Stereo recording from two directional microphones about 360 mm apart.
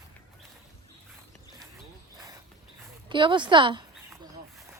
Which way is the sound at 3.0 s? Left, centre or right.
Centre.